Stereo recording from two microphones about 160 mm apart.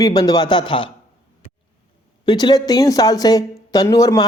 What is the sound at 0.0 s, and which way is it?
Speech, 25° left (ahead or behind).